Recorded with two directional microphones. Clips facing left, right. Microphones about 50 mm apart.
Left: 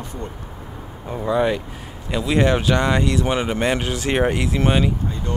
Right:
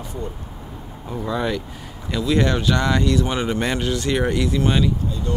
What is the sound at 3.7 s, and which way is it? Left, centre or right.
Speech, left.